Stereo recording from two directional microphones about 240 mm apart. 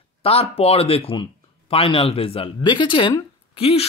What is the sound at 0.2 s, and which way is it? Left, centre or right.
Speech, left.